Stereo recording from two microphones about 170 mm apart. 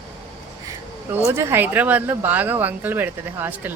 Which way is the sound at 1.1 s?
15° right (ahead or behind).